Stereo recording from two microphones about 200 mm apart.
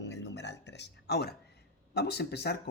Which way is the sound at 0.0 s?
60° left (ahead or behind).